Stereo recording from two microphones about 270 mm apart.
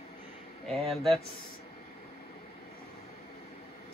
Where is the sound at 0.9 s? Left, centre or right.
Centre.